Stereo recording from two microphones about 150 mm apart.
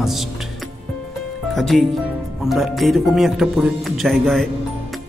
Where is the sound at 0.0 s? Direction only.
Centre (ahead or behind).